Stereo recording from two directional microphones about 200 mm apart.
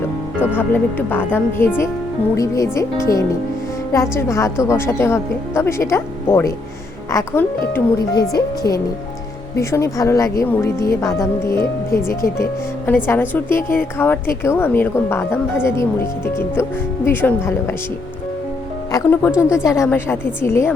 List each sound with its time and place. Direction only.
0.5 s a woman's voice: 10° left (ahead or behind)
9.6 s a woman's voice: 15° left (ahead or behind)
18.9 s a woman's voice: 15° left (ahead or behind)